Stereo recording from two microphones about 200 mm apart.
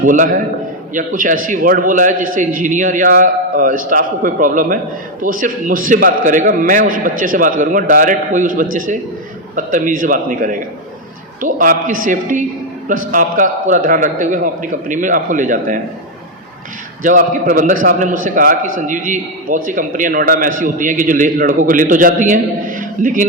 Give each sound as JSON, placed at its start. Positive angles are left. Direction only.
{"t": 0.0, "sound": "a man's voice", "side_deg": -40}
{"t": 17.0, "sound": "a man's voice", "side_deg": -40}